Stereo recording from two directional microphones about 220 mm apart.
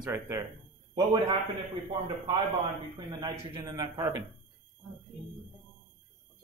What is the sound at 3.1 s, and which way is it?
Speech, 20° right (ahead or behind).